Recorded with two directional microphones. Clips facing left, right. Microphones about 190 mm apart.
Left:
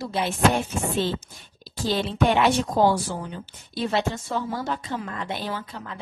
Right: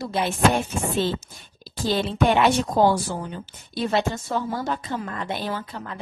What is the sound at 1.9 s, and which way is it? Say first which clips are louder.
A woman's voice: right 1 dB; 50° right (ahead or behind).